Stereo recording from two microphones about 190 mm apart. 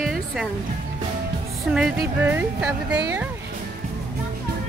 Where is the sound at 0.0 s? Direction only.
Centre (ahead or behind).